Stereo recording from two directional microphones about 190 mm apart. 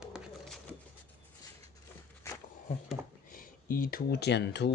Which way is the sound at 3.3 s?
45° left (ahead or behind).